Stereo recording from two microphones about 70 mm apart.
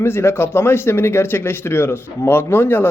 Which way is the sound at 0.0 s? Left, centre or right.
Left.